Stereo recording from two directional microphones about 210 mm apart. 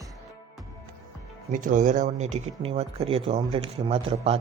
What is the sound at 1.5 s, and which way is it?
Speech, 40° right (ahead or behind).